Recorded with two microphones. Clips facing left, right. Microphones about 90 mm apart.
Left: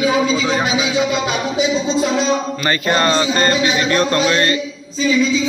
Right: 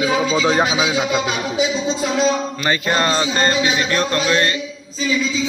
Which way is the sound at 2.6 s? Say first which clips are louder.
Left 1 dB; 10° right (ahead or behind).